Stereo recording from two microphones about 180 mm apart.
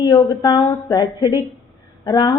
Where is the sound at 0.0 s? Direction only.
20° left (ahead or behind).